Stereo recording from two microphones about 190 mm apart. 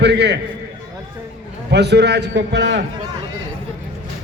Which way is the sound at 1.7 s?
60° right (ahead or behind).